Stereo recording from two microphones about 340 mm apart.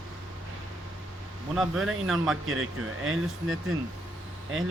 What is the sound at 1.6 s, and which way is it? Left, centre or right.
Speech, centre.